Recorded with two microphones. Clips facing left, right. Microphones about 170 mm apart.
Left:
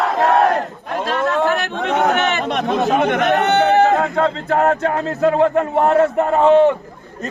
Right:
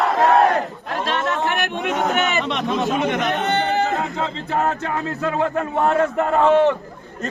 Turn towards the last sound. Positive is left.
turn(degrees=15)  # may be behind; listen again after turning